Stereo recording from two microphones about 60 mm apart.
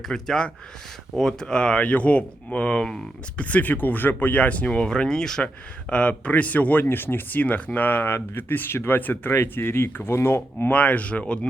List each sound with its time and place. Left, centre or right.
0.1 s speech: centre
5.9 s speech: left
9.0 s speech: left
9.3 s speech: left
10.7 s speech: left